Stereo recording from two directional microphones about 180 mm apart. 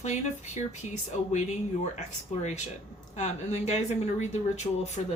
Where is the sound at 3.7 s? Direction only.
40° left (ahead or behind).